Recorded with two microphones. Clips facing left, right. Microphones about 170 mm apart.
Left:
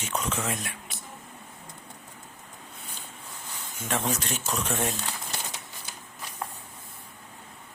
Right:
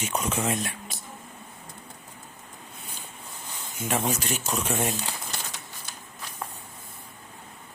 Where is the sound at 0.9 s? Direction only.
40° right (ahead or behind).